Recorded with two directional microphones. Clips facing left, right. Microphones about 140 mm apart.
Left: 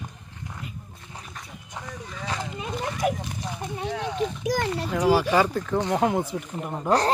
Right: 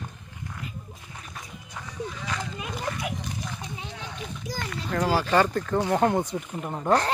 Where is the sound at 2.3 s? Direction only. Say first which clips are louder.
Left 2 dB; 30° left (ahead or behind).